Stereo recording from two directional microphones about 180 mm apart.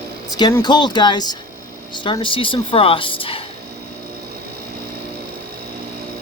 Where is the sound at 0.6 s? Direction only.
25° left (ahead or behind).